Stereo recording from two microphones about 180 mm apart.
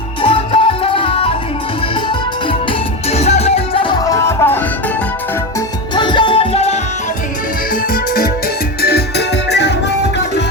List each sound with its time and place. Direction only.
0.2 s music: 30° left (ahead or behind)
3.1 s music: 35° left (ahead or behind)
4.2 s music: 15° left (ahead or behind)
5.9 s music: 25° left (ahead or behind)
8.8 s music: 60° left (ahead or behind)